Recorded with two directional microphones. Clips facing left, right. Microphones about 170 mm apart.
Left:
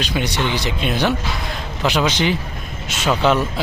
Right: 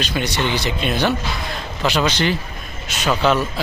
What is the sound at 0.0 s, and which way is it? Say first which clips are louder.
Speech: even; 10° left (ahead or behind).